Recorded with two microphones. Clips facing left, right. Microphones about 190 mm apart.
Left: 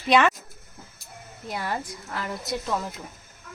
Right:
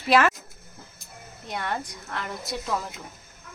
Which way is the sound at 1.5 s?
5° left (ahead or behind).